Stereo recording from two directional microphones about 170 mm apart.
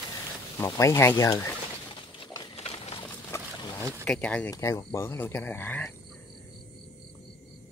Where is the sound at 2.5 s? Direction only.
35° left (ahead or behind).